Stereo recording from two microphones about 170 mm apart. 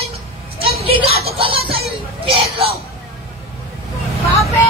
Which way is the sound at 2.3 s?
35° right (ahead or behind).